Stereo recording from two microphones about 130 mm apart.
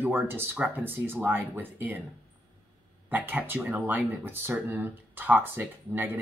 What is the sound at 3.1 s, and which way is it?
Speech, 15° right (ahead or behind).